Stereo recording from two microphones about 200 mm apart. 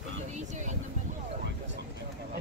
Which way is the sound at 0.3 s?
35° right (ahead or behind).